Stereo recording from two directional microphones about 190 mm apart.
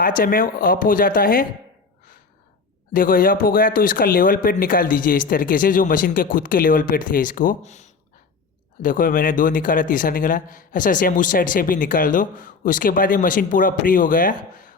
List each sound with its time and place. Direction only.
0.0 s speech: 50° left (ahead or behind)
2.9 s speech: 50° left (ahead or behind)